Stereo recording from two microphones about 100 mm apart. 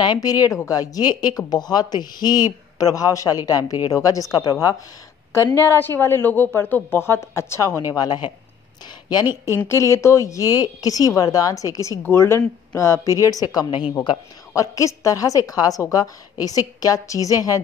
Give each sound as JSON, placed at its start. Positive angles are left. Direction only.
{"t": 0.0, "sound": "speech", "side_deg": 45}
{"t": 7.9, "sound": "speech", "side_deg": 45}
{"t": 9.7, "sound": "speech", "side_deg": 30}
{"t": 13.2, "sound": "speech", "side_deg": 40}